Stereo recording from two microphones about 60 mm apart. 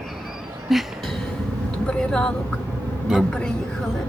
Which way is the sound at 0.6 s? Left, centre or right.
Centre.